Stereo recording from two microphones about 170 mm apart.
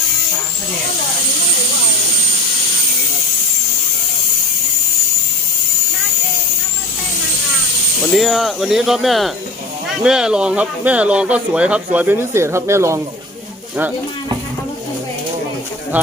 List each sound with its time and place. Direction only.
8.1 s speech: centre (ahead or behind); by 13.0 s 15° right (ahead or behind)